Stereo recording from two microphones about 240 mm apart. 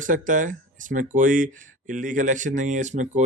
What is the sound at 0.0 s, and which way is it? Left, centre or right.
Speech, right.